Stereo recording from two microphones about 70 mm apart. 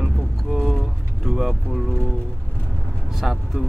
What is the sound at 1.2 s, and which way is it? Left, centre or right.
Vehicle, centre.